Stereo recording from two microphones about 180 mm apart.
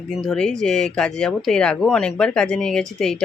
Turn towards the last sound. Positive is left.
turn(degrees=5)  # may be behind; listen again after turning